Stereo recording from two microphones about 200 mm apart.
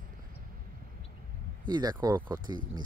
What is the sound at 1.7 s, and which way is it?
Speech, 20° right (ahead or behind).